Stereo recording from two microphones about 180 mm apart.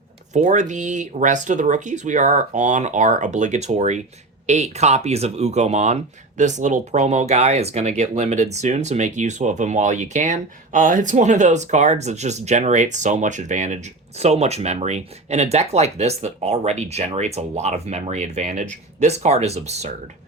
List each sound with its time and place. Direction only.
0.3 s speech: 40° right (ahead or behind)